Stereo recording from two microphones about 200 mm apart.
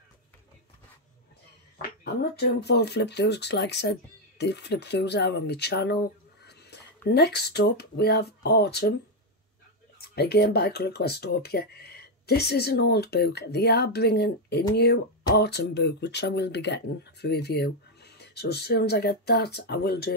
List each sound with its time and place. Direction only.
1.8 s speech: 50° left (ahead or behind)
7.1 s speech: 55° left (ahead or behind)
9.9 s speech: 55° left (ahead or behind)